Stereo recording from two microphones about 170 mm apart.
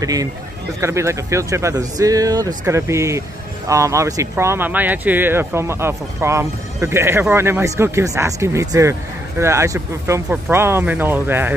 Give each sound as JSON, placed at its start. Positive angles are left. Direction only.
{"t": 0.0, "sound": "a man's voice", "side_deg": -20}